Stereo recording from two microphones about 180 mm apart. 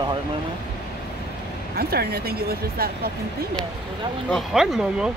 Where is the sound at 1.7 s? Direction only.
60° right (ahead or behind).